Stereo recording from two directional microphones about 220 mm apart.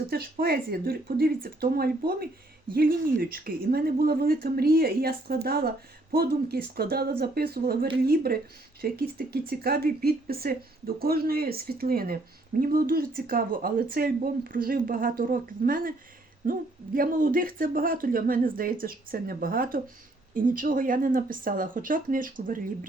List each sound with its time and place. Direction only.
0.1 s speech: 45° right (ahead or behind)